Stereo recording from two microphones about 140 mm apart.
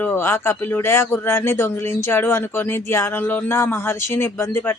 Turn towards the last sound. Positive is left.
turn(degrees=15)  # may be behind; listen again after turning